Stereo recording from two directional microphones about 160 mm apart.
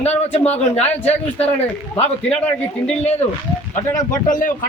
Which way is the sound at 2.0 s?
40° left (ahead or behind).